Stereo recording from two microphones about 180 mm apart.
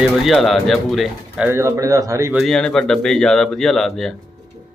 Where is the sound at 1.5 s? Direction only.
15° right (ahead or behind).